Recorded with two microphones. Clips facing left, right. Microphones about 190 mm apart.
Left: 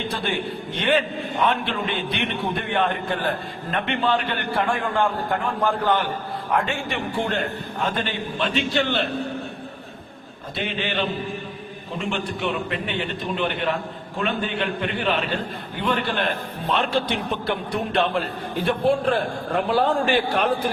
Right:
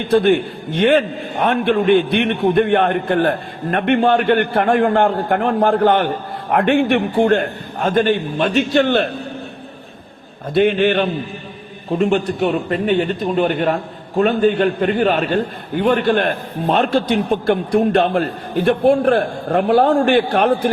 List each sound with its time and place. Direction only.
0.1 s a man's voice: 45° right (ahead or behind)
10.5 s a man's voice: 50° right (ahead or behind)